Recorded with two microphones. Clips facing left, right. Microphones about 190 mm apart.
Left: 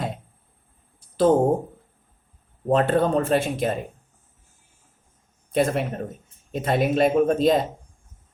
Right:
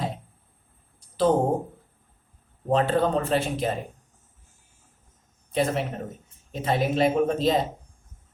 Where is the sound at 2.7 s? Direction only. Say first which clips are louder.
Left 2 dB; 50° left (ahead or behind).